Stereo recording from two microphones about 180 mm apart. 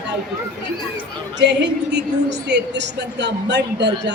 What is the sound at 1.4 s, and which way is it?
A woman's voice, 75° right (ahead or behind).